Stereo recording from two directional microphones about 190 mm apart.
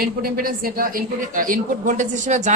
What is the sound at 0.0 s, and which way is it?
Speech, 50° right (ahead or behind).